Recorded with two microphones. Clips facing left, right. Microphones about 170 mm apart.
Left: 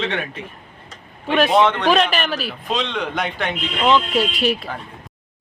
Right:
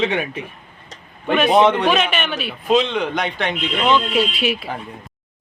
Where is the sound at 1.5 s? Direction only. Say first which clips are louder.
Right 4 dB; 15° right (ahead or behind).